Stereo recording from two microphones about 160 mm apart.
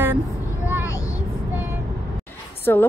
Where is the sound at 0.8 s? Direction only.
20° left (ahead or behind).